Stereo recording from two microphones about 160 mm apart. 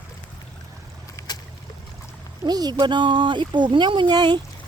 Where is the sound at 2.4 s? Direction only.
25° right (ahead or behind).